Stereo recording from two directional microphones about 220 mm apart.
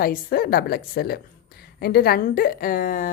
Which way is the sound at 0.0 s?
40° left (ahead or behind).